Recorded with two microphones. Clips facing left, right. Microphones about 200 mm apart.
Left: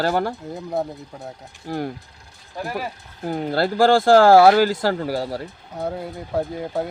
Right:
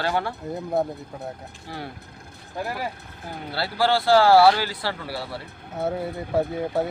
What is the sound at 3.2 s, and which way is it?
Speech, 50° left (ahead or behind).